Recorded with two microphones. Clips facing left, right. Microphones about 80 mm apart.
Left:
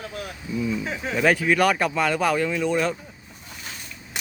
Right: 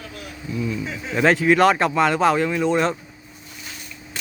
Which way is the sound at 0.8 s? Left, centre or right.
Left.